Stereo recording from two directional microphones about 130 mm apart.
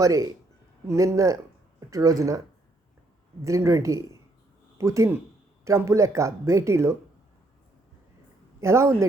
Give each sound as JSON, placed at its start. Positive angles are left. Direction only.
{"t": 0.0, "sound": "speech", "side_deg": -25}
{"t": 3.4, "sound": "speech", "side_deg": -25}
{"t": 8.6, "sound": "speech", "side_deg": -20}